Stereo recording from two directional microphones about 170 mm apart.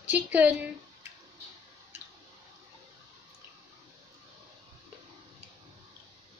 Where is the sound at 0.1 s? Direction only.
10° right (ahead or behind).